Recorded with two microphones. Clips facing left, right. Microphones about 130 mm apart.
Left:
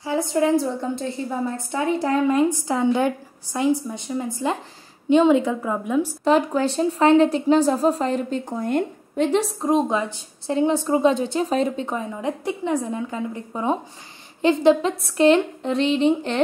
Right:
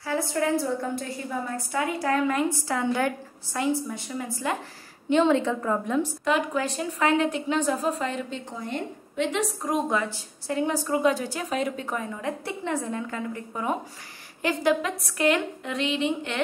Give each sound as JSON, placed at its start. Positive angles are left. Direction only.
{"t": 0.0, "sound": "a woman's voice", "side_deg": 20}
{"t": 6.2, "sound": "a woman's voice", "side_deg": 35}